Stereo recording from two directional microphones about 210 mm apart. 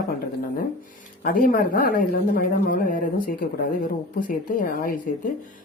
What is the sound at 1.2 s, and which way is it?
Speech, 40° left (ahead or behind).